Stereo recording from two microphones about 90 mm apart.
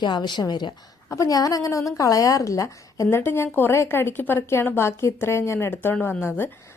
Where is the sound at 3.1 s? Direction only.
25° left (ahead or behind).